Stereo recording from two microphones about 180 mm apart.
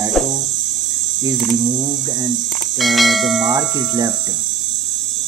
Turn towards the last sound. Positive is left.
turn(degrees=0)  # may be behind; listen again after turning